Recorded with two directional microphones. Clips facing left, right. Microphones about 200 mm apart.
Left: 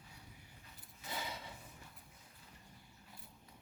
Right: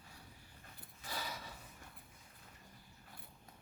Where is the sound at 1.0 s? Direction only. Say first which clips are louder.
Left 1 dB; 20° left (ahead or behind).